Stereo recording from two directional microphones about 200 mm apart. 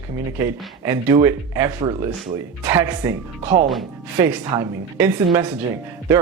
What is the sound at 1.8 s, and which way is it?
Speech, 25° right (ahead or behind).